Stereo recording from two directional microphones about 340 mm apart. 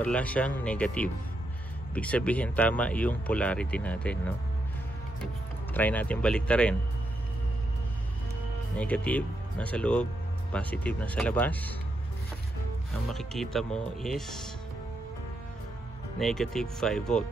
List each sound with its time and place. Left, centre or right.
0.0 s speech: centre
5.2 s speech: centre
8.7 s speech: centre
13.1 s speech: centre
16.2 s speech: centre